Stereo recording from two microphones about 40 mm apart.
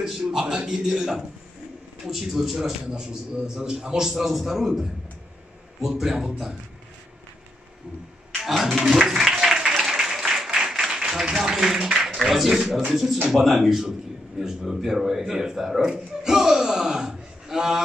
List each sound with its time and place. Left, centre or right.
0.0 s a man's voice: centre
2.9 s a man's voice: centre
8.5 s a man's voice: centre
9.3 s applause: centre
11.3 s a man's voice: centre